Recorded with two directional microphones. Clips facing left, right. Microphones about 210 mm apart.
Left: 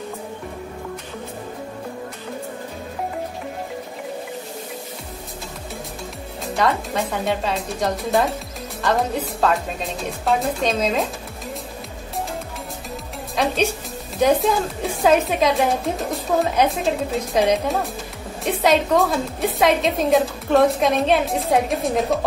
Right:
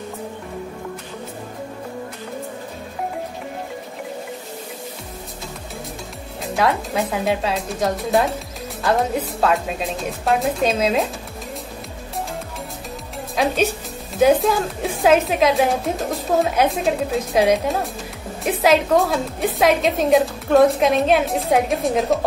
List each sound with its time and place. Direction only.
6.4 s a woman's voice: centre (ahead or behind)
10.2 s a woman's voice: 5° right (ahead or behind)
13.4 s a woman's voice: centre (ahead or behind)